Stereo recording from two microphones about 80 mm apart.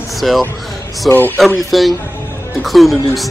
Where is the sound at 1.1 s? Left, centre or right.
Left.